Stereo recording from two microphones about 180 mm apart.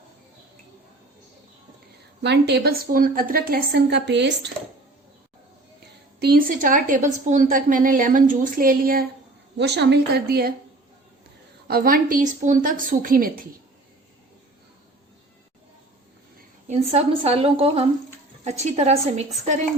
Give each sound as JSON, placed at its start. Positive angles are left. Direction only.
{"t": 2.2, "sound": "a woman's voice", "side_deg": -70}
{"t": 6.1, "sound": "a woman's voice", "side_deg": -60}
{"t": 9.6, "sound": "a woman's voice", "side_deg": -70}
{"t": 11.7, "sound": "a woman's voice", "side_deg": -55}
{"t": 16.6, "sound": "a woman's voice", "side_deg": -35}